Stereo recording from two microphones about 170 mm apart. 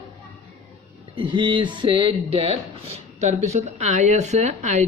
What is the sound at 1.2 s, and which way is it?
Speech, 30° right (ahead or behind).